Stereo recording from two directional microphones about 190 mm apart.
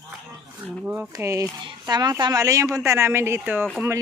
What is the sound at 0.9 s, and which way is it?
A woman's voice, 10° right (ahead or behind).